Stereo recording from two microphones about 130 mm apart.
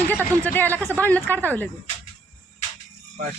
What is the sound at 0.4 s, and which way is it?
Speech, 15° left (ahead or behind).